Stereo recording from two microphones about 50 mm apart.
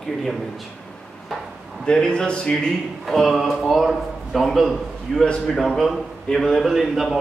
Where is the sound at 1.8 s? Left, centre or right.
Centre.